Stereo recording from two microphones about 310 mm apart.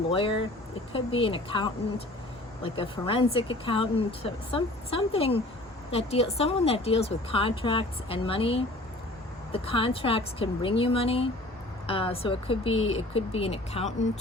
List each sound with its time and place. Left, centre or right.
0.1 s speech: centre